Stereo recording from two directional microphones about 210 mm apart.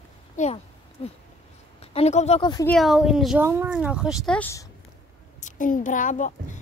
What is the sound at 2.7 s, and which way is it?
Speech, centre (ahead or behind).